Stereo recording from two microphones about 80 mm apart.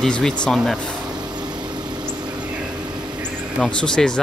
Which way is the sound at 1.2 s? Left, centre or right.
Right.